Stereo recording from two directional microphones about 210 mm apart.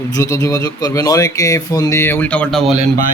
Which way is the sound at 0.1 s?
15° left (ahead or behind).